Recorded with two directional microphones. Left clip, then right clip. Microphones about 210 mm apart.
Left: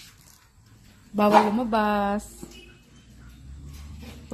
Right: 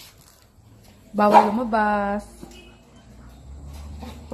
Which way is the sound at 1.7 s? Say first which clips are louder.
Right 2 dB; 10° left (ahead or behind).